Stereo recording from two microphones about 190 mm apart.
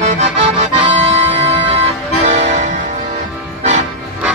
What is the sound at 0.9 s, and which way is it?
Music, 35° right (ahead or behind).